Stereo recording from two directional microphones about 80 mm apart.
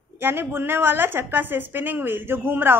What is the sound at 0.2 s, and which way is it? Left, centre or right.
A woman's voice, right.